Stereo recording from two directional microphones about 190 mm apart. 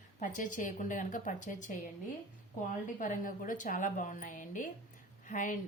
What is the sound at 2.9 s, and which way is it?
A woman's voice, 45° left (ahead or behind).